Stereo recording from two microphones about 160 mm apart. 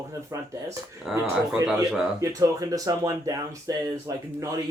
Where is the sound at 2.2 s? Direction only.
20° right (ahead or behind).